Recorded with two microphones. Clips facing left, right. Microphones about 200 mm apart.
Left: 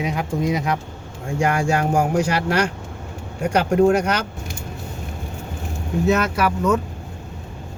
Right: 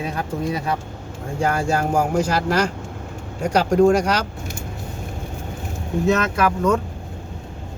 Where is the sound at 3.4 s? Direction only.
5° left (ahead or behind).